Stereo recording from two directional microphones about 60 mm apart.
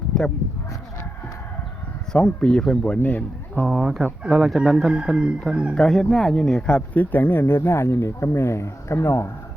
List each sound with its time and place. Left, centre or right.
0.1 s speech: centre
2.1 s speech: centre
3.7 s speech: centre
5.7 s speech: centre; by 9.3 s left